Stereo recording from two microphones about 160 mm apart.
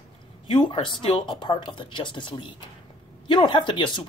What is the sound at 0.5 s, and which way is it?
Speech, 30° left (ahead or behind).